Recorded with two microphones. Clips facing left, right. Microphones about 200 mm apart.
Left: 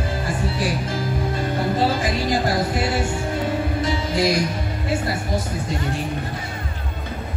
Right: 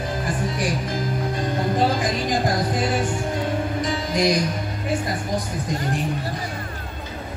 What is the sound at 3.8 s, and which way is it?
Music, 15° right (ahead or behind).